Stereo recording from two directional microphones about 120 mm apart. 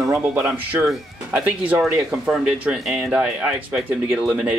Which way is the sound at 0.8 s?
5° right (ahead or behind).